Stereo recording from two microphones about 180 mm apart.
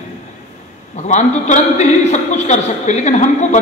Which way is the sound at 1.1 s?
40° left (ahead or behind).